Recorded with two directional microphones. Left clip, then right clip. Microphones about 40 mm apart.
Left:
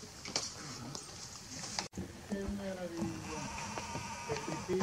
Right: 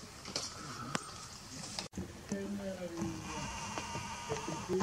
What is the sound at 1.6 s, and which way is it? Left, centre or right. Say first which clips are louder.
Boat: left 3 dB; centre.